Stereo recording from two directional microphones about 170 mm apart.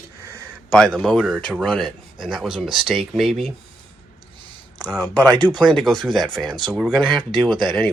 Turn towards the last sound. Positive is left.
turn(degrees=0)  # may be behind; listen again after turning